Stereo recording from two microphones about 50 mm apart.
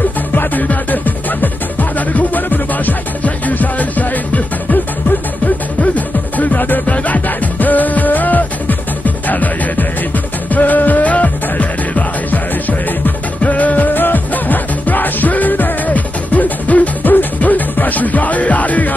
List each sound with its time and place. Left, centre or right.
0.3 s music: left
5.8 s music: left